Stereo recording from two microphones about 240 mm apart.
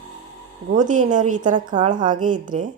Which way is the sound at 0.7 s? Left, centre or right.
Right.